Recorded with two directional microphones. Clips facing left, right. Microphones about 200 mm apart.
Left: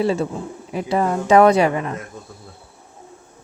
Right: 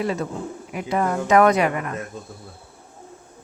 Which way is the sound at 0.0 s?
30° left (ahead or behind).